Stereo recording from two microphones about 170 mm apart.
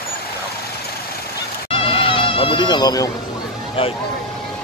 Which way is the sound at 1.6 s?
30° left (ahead or behind).